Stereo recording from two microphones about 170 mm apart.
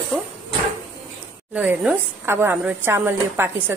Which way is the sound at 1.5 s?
5° right (ahead or behind).